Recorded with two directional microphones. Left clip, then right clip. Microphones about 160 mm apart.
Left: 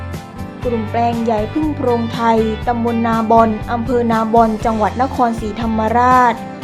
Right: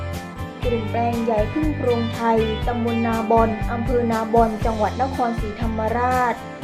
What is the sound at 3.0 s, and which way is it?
Music, 80° left.